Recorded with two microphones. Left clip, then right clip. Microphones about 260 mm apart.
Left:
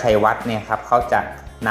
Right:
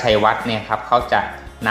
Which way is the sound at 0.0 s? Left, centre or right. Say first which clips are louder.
Right 1 dB; centre.